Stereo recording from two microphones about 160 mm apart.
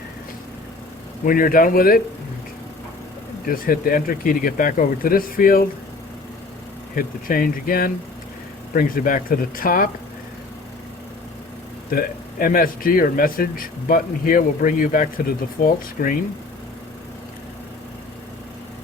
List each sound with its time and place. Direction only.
1.2 s a man's voice: 60° left (ahead or behind)
3.4 s a man's voice: 65° left (ahead or behind)
6.9 s a man's voice: 60° left (ahead or behind)
11.9 s a man's voice: 65° left (ahead or behind)